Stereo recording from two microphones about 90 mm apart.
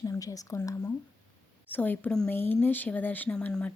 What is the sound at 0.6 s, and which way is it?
Speech, 30° left (ahead or behind).